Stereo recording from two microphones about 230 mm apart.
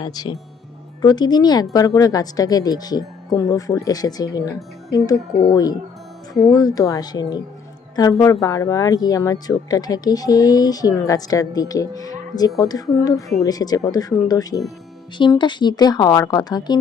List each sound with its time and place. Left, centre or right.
0.0 s speech: centre